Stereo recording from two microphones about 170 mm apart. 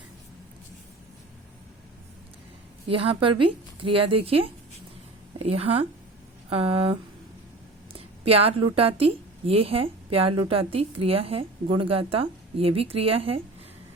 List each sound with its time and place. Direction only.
2.9 s a woman's voice: 35° right (ahead or behind)
7.9 s a woman's voice: 35° right (ahead or behind)